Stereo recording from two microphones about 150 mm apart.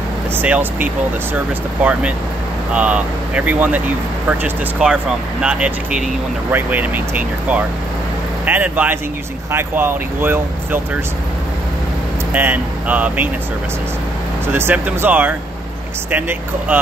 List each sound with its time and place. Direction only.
0.4 s speech: 10° right (ahead or behind)
12.3 s speech: 10° right (ahead or behind)
14.5 s speech: 15° right (ahead or behind)